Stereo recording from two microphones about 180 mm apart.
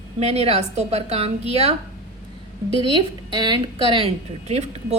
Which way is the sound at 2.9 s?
25° right (ahead or behind).